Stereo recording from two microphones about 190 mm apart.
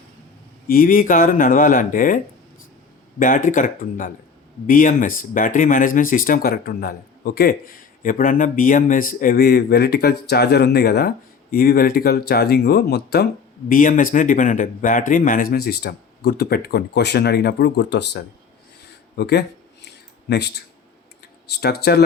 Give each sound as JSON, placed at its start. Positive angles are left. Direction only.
{"t": 0.7, "sound": "speech", "side_deg": 50}
{"t": 13.7, "sound": "speech", "side_deg": 45}
{"t": 19.1, "sound": "a sound", "side_deg": 60}
{"t": 21.5, "sound": "speech", "side_deg": 60}